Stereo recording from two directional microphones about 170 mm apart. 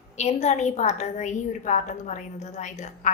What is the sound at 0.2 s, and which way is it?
A woman's voice, 40° left (ahead or behind).